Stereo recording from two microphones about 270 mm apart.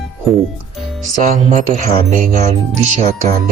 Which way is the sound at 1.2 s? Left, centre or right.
Right.